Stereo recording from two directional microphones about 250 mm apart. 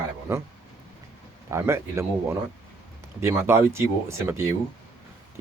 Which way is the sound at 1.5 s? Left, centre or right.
Centre.